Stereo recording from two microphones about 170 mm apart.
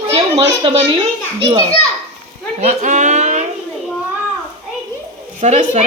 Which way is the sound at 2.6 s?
45° right (ahead or behind).